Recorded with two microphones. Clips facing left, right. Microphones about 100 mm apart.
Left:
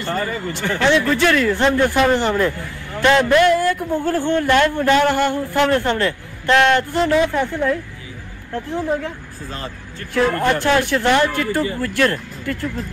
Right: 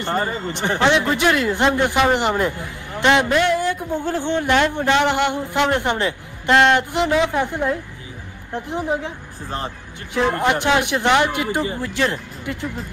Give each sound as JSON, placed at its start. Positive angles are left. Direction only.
{"t": 0.0, "sound": "speech", "side_deg": -25}
{"t": 3.3, "sound": "speech", "side_deg": 55}
{"t": 4.7, "sound": "a man's voice", "side_deg": -15}